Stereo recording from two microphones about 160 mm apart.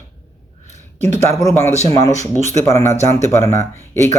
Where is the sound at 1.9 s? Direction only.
20° left (ahead or behind).